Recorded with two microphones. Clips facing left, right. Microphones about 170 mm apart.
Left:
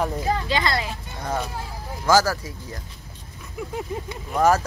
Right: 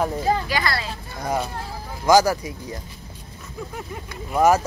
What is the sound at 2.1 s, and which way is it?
Speech, 15° right (ahead or behind).